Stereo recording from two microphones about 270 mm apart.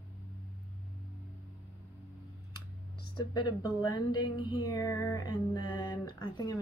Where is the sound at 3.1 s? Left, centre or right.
Centre.